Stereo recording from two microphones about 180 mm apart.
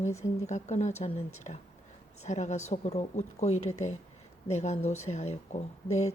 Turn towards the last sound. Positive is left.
turn(degrees=40)  # may be behind; listen again after turning